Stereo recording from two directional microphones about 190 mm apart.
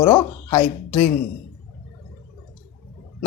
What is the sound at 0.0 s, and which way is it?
Speech, 10° left (ahead or behind).